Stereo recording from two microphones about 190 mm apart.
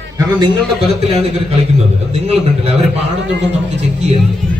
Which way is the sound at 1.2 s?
35° right (ahead or behind).